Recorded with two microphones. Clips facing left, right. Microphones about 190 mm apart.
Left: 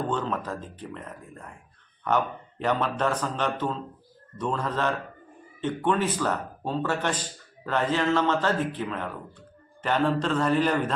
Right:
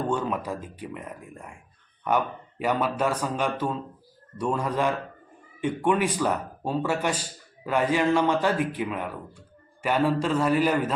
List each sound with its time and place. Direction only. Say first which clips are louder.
0.1 s speech: right 2 dB; 10° right (ahead or behind)